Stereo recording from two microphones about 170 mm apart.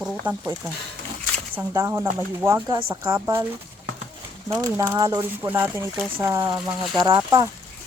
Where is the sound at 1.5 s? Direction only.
15° right (ahead or behind).